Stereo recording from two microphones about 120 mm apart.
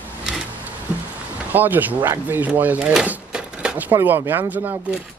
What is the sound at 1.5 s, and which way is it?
Speech, 15° right (ahead or behind).